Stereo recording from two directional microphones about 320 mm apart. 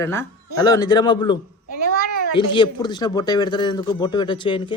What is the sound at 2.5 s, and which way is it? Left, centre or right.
A man's voice, centre.